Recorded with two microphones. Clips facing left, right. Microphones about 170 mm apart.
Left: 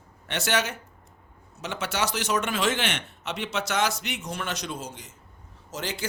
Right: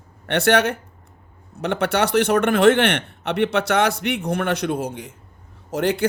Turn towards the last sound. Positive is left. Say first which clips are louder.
# right 12 dB
turn(degrees=-60)  # may be behind; listen again after turning